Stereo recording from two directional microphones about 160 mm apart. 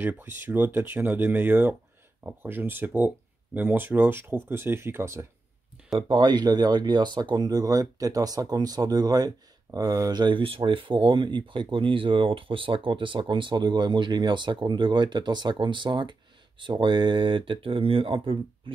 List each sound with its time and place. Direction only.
0.0 s speech: 10° right (ahead or behind)
5.9 s speech: 25° right (ahead or behind)